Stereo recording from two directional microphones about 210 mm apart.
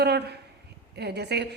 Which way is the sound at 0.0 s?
50° right (ahead or behind).